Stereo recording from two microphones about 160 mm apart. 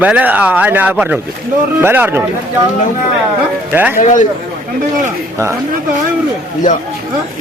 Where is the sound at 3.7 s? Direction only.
10° right (ahead or behind).